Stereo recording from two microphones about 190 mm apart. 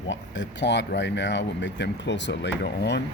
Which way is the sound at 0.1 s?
70° left (ahead or behind).